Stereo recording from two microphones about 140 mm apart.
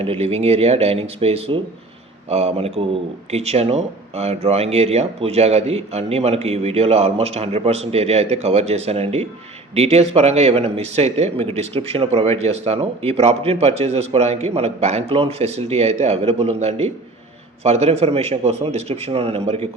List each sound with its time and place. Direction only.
0.0 s speech: 45° right (ahead or behind)